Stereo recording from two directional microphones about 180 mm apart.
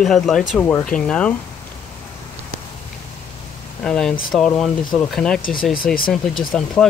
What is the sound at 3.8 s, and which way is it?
Speech, 5° left (ahead or behind).